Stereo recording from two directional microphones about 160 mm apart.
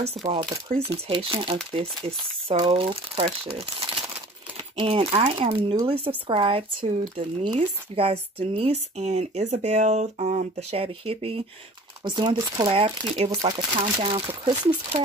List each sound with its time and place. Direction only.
0.2 s speech: 30° right (ahead or behind)
0.7 s speech: 40° right (ahead or behind)